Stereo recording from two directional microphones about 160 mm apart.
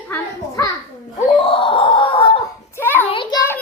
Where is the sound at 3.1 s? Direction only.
30° left (ahead or behind).